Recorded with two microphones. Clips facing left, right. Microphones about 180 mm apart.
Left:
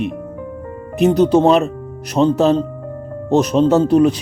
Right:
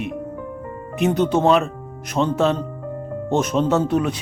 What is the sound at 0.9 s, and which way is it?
A man's voice, 35° left (ahead or behind).